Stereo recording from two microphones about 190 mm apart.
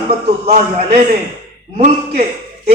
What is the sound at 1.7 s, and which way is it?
Speech, 35° right (ahead or behind).